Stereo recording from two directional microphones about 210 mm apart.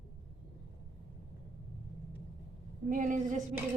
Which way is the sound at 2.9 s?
40° right (ahead or behind).